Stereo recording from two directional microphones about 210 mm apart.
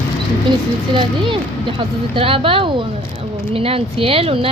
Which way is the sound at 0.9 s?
25° right (ahead or behind).